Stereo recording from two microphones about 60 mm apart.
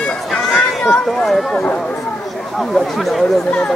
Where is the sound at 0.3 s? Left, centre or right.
Centre.